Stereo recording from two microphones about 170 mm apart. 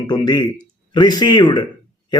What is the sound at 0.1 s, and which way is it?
A man's voice, 25° left (ahead or behind).